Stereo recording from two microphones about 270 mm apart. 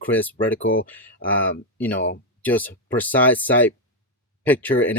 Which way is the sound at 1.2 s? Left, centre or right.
Left.